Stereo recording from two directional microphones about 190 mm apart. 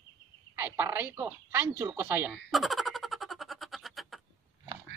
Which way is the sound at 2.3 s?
Centre (ahead or behind).